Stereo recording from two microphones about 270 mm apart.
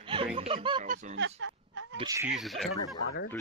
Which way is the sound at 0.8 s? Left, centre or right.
Right.